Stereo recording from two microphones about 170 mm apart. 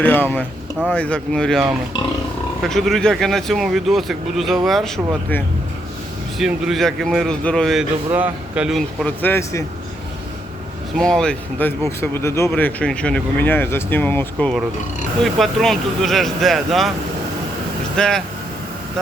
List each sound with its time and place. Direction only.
0.0 s speech: 10° left (ahead or behind)
2.6 s speech: centre (ahead or behind)
6.4 s speech: centre (ahead or behind)
9.2 s speech: 15° left (ahead or behind)
10.9 s speech: 5° left (ahead or behind)
17.9 s speech: 5° left (ahead or behind)